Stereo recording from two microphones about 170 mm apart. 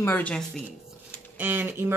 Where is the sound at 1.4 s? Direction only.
10° right (ahead or behind).